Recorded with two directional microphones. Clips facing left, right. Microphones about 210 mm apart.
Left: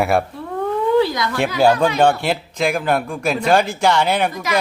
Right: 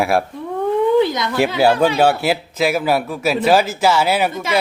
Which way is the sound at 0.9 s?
20° right (ahead or behind).